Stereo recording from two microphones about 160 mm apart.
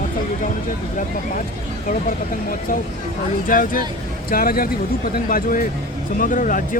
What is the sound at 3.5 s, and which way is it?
Speech, 60° left (ahead or behind).